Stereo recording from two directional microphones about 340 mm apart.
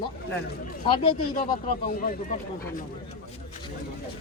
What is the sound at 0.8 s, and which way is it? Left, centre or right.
Speech, centre.